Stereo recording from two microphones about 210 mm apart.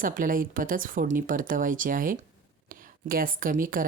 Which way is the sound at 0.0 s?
40° right (ahead or behind).